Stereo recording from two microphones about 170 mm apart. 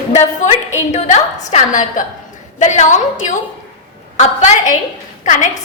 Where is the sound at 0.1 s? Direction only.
40° left (ahead or behind).